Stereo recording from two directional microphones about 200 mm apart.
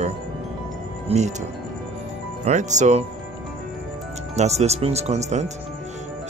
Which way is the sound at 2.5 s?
35° right (ahead or behind).